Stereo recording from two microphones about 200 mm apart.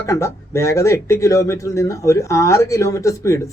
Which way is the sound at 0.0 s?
15° left (ahead or behind).